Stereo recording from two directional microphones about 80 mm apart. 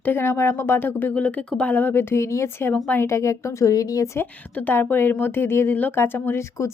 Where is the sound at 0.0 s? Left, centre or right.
Left.